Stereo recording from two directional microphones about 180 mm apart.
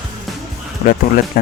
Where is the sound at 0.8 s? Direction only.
40° left (ahead or behind).